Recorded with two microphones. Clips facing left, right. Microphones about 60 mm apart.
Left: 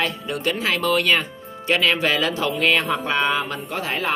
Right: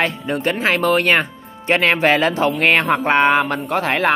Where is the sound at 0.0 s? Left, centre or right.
Right.